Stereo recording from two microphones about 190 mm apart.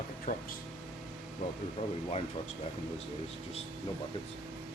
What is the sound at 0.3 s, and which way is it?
Speech, 50° left (ahead or behind).